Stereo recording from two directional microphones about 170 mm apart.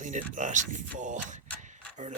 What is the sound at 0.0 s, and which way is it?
Speech, 50° right (ahead or behind).